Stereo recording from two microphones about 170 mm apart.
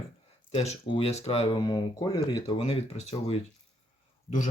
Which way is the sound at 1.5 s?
25° left (ahead or behind).